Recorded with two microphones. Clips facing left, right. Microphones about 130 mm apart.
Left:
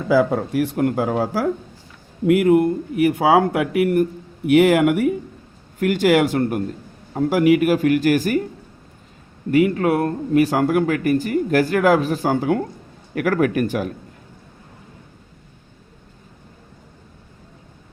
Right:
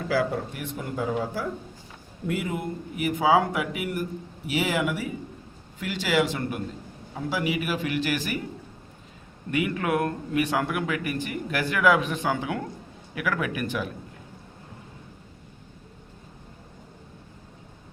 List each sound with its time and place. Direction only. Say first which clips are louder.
0.3 s speech: left 10 dB; 90° left; by 2.6 s 70° left (ahead or behind)
3.1 s speech: left 4 dB; 60° left (ahead or behind)
5.8 s a man's voice: left 9 dB; 55° left (ahead or behind)
9.5 s a man's voice: left 9 dB; 35° left (ahead or behind)